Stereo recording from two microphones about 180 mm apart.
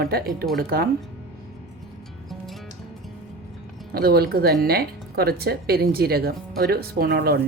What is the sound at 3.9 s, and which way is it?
Speech, 60° right (ahead or behind).